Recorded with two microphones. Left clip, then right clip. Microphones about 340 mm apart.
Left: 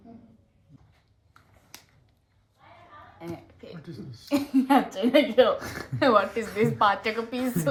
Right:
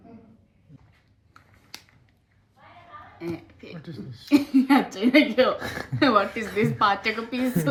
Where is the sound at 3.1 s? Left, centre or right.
Centre.